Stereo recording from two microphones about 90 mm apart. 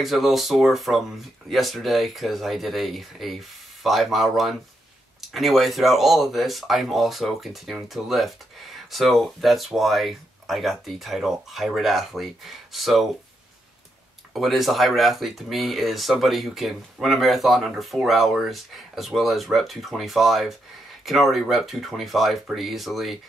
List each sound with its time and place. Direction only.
0.0 s speech: centre (ahead or behind)
14.3 s speech: centre (ahead or behind)